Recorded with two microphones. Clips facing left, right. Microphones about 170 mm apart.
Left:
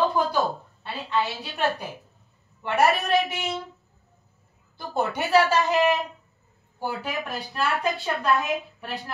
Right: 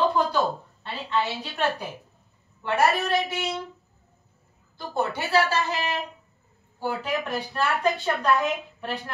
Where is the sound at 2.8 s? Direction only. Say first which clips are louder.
Left 2 dB; 20° left (ahead or behind).